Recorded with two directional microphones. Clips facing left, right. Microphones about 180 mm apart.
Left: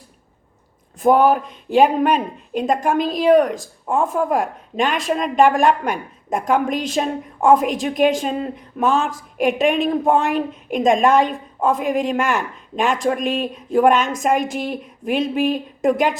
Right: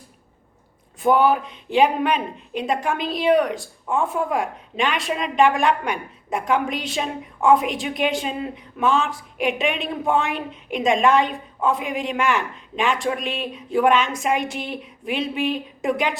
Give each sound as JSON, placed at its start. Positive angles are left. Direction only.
{"t": 1.0, "sound": "a woman's voice", "side_deg": 45}